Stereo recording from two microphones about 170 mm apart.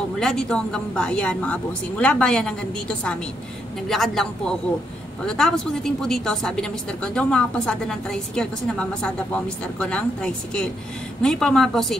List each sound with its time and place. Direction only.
0.2 s a woman's voice: 5° left (ahead or behind)